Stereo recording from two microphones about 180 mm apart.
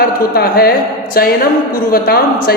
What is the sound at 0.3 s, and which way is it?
Speech, 60° left (ahead or behind).